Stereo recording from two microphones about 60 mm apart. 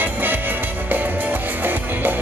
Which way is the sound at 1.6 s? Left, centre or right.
Right.